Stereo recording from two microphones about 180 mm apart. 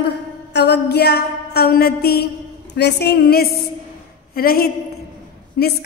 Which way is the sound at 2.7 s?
70° left (ahead or behind).